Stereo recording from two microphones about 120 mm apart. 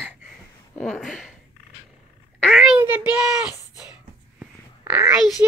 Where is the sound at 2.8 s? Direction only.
15° right (ahead or behind).